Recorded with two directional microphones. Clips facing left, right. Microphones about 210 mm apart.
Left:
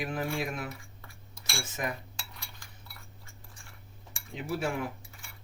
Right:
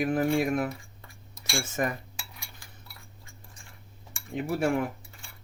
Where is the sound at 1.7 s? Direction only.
50° right (ahead or behind).